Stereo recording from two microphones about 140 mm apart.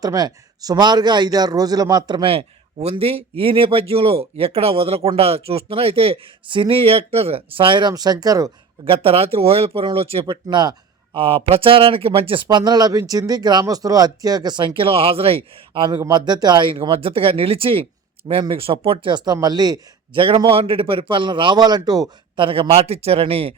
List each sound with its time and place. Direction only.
0.0 s speech: 30° right (ahead or behind)
2.3 s a man's voice: 45° right (ahead or behind); by 8.4 s 25° right (ahead or behind)
8.8 s speech: 40° right (ahead or behind)
22.4 s a man's voice: 40° right (ahead or behind)